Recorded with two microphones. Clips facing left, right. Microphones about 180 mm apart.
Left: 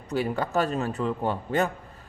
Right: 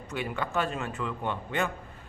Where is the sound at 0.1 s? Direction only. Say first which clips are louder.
Left 6 dB; 35° left (ahead or behind).